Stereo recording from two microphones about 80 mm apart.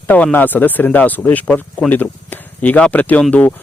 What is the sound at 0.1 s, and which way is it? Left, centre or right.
Speech, centre.